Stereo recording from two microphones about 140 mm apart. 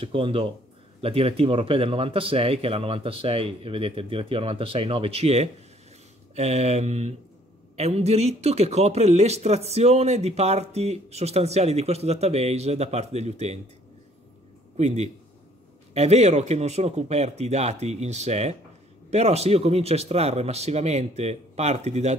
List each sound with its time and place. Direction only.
0.0 s speech: 40° right (ahead or behind)
14.8 s a man's voice: 55° right (ahead or behind)